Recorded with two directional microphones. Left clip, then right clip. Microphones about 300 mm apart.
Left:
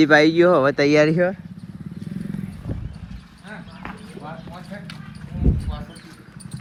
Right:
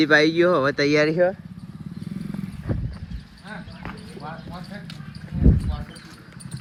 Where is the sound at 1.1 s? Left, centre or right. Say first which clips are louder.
Even; left.